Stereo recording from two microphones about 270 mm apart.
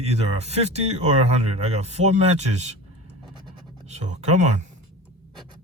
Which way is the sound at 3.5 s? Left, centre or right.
Right.